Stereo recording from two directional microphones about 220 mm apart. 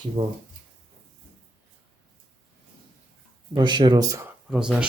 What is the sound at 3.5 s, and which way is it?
Speech, 20° right (ahead or behind).